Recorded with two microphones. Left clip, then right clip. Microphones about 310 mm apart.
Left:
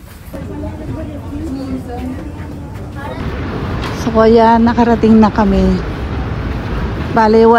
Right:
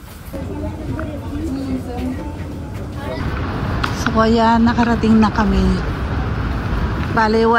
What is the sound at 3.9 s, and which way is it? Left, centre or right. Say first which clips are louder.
A woman's voice: left 7 dB; centre.